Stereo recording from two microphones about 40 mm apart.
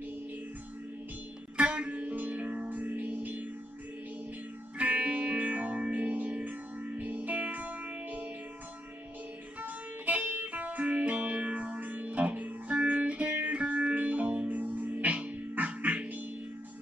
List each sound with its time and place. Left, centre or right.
1.6 s music: right
4.7 s music: right
9.6 s music: right
14.6 s music: right